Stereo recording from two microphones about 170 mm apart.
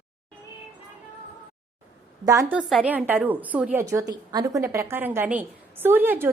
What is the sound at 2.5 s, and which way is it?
A woman's voice, 5° right (ahead or behind).